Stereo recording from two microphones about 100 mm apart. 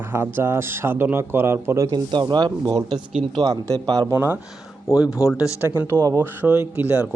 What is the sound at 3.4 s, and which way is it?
Speech, 40° right (ahead or behind).